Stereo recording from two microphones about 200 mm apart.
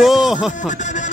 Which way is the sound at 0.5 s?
40° left (ahead or behind).